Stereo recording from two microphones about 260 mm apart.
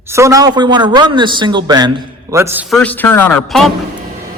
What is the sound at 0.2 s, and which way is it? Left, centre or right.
A man's voice, centre.